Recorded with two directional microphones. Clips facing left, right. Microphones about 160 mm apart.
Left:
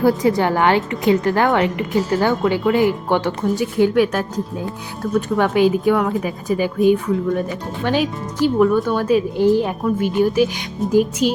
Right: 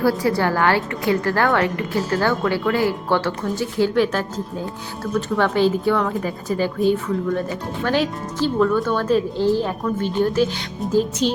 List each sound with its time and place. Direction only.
0.0 s a woman's voice: 20° left (ahead or behind)
5.4 s speech: 15° left (ahead or behind)